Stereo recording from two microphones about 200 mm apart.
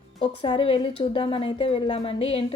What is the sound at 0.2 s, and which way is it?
Speech, 25° left (ahead or behind).